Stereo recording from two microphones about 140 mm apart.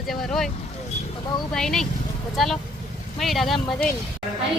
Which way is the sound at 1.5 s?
5° left (ahead or behind).